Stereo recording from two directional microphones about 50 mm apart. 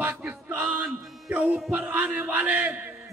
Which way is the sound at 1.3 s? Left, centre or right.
Right.